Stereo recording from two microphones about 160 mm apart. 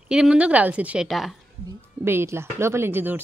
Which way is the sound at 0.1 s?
5° right (ahead or behind).